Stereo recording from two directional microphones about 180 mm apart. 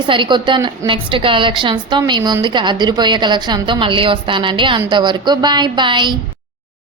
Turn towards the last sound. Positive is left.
turn(degrees=-25)  # may be behind; listen again after turning